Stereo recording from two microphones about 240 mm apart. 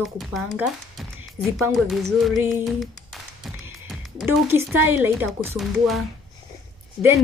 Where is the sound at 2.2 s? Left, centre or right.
Centre.